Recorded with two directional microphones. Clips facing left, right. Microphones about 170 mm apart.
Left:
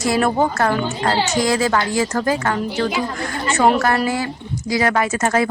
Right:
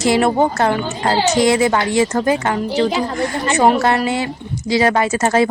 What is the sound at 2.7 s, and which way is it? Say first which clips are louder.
A woman's voice: right 4 dB; 30° right (ahead or behind).